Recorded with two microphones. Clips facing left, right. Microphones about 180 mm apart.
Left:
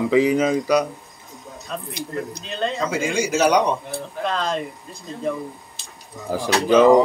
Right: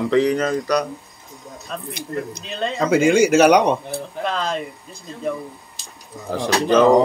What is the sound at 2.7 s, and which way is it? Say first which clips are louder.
Speech: right 11 dB; 60° right (ahead or behind).